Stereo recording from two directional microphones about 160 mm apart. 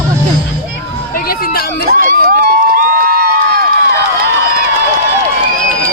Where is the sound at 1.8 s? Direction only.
65° right (ahead or behind).